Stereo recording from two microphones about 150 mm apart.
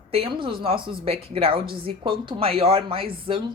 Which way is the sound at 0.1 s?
35° right (ahead or behind).